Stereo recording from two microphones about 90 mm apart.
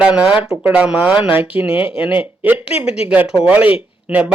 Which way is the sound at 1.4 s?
90° left.